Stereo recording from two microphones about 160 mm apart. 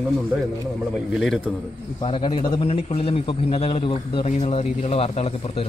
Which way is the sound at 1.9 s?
35° left (ahead or behind).